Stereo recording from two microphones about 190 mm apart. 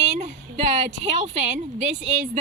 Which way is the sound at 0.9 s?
35° right (ahead or behind).